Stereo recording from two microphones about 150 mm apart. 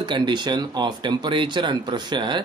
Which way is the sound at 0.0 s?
30° right (ahead or behind).